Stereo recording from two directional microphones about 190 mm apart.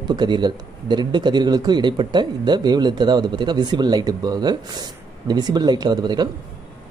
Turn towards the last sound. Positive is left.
turn(degrees=-20)  # may be behind; listen again after turning